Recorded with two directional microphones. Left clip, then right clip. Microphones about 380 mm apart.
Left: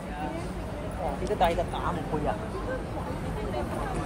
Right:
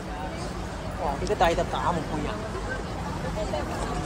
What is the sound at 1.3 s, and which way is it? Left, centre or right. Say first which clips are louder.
Speech: right 2 dB; right.